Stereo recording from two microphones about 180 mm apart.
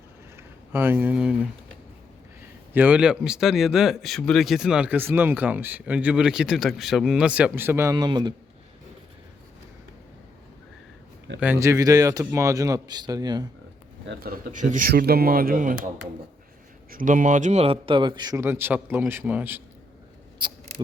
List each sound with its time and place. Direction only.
0.3 s speech: 10° right (ahead or behind)
2.7 s speech: 10° right (ahead or behind); by 8.3 s 25° right (ahead or behind)
11.3 s a man's voice: 10° right (ahead or behind)
14.1 s speech: 55° right (ahead or behind)
16.9 s a man's voice: 50° right (ahead or behind); by 19.6 s 10° right (ahead or behind)
20.4 s speech: 25° right (ahead or behind)